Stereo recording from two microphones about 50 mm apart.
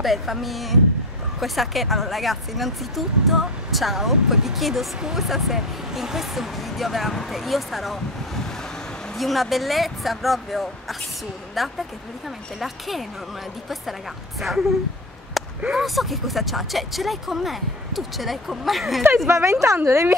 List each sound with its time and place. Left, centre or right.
0.0 s speech: centre
9.2 s speech: centre
14.4 s speech: centre
15.4 s a sound: centre
15.8 s speech: centre
19.2 s speech: right
19.8 s a woman's voice: right